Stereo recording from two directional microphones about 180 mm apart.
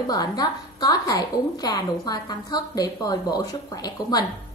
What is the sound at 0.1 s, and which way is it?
A woman's voice, 20° left (ahead or behind).